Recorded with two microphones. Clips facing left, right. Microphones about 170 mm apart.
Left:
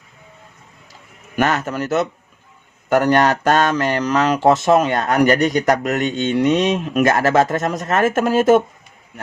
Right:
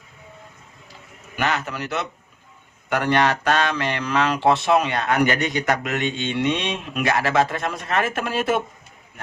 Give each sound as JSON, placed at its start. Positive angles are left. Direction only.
{"t": 1.4, "sound": "speech", "side_deg": 45}